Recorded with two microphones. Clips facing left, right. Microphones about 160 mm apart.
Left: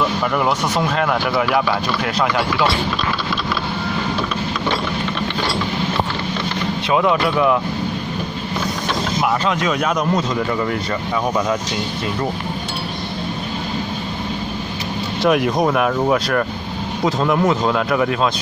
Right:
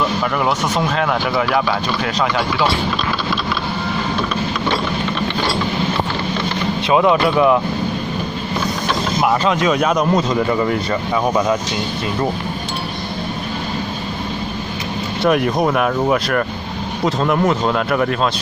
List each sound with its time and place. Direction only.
0.2 s speech: 5° left (ahead or behind)
6.9 s speech: 25° right (ahead or behind)
9.4 s speech: 25° right (ahead or behind)
15.2 s speech: centre (ahead or behind)